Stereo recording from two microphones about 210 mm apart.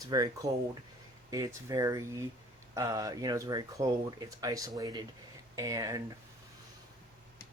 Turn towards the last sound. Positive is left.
turn(degrees=-15)  # may be behind; listen again after turning